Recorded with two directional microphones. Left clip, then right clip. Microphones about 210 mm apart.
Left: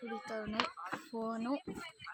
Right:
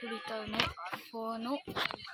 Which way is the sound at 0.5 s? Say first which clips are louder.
Right 4 dB; 40° left (ahead or behind).